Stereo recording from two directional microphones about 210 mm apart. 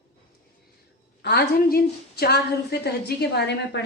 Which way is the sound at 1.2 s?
50° left (ahead or behind).